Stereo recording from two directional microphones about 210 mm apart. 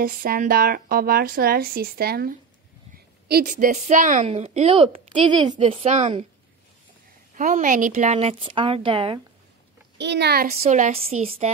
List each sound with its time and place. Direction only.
0.0 s a woman's voice: 45° right (ahead or behind)
7.3 s a woman's voice: 40° right (ahead or behind)
9.9 s speech: 55° right (ahead or behind)
10.6 s a woman's voice: 30° right (ahead or behind)